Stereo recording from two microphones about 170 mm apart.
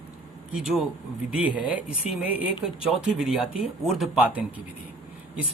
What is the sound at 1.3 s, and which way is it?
Speech, 5° right (ahead or behind).